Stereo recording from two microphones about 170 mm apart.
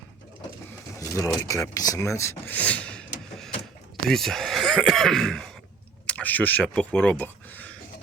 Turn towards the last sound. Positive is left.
turn(degrees=10)  # may be behind; listen again after turning